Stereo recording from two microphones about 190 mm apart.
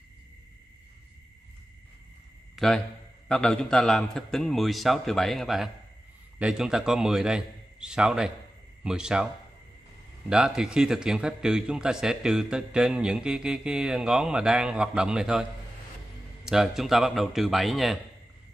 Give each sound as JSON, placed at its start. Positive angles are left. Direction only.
{"t": 2.5, "sound": "a man's voice", "side_deg": 0}
{"t": 10.3, "sound": "a man's voice", "side_deg": -5}
{"t": 16.4, "sound": "a man's voice", "side_deg": 0}